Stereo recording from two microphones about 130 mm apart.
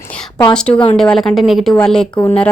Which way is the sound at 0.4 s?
5° left (ahead or behind).